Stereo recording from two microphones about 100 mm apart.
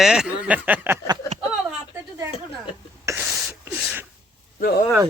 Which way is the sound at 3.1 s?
30° right (ahead or behind).